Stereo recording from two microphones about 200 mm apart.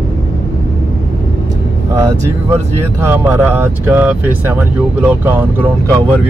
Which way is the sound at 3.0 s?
10° right (ahead or behind).